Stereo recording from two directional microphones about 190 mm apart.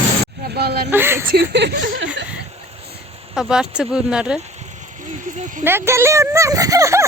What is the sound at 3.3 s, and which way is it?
Speech, 5° right (ahead or behind).